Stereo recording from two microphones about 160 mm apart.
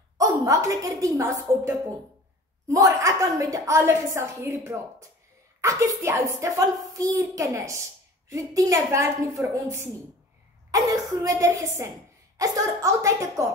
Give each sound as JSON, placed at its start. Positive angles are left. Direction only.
{"t": 0.2, "sound": "a woman's voice", "side_deg": -20}
{"t": 2.7, "sound": "a woman's voice", "side_deg": -20}